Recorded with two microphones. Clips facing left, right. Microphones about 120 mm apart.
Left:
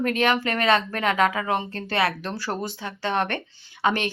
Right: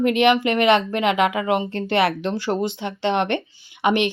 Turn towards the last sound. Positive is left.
turn(degrees=-15)  # may be behind; listen again after turning